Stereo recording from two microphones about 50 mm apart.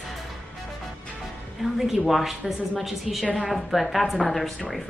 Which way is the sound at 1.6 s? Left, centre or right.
Centre.